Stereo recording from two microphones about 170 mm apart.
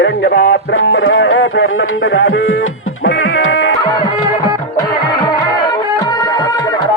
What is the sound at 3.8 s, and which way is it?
Music, 25° left (ahead or behind).